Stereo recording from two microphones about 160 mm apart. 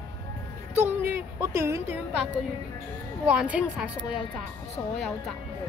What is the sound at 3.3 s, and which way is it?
Speech, 10° right (ahead or behind).